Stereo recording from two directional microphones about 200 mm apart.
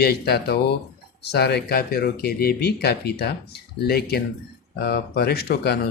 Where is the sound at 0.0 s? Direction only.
50° left (ahead or behind).